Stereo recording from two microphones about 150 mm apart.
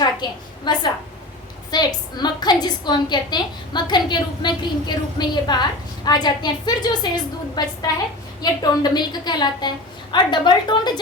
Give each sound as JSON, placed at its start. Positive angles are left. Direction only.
{"t": 0.0, "sound": "a woman's voice", "side_deg": 30}